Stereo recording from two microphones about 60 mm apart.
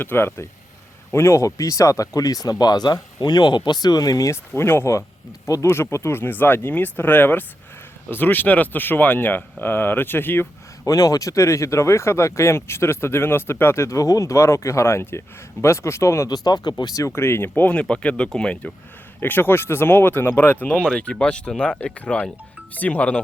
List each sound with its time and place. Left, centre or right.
0.0 s speech: left
1.1 s speech: left
4.3 s speech: left
10.8 s speech: left
16.3 s speech: left
17.2 s speech: left
17.7 s speech: centre
19.2 s speech: left